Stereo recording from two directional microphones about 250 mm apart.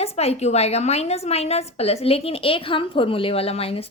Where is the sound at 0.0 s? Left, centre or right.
Left.